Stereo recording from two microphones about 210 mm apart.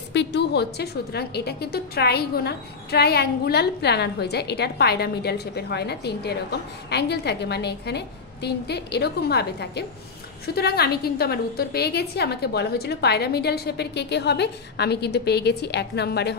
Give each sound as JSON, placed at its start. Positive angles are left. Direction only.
{"t": 0.1, "sound": "a woman's voice", "side_deg": 55}